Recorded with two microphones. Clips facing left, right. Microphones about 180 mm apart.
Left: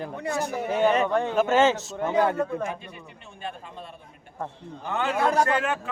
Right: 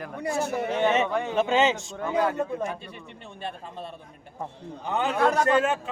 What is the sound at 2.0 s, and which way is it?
Speech, 25° left (ahead or behind).